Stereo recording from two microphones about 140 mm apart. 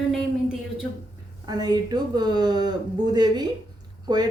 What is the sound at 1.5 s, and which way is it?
Speech, 30° right (ahead or behind).